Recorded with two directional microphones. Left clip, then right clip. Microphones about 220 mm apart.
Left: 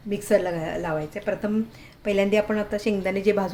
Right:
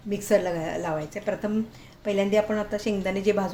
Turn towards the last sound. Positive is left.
turn(degrees=10)  # may be behind; listen again after turning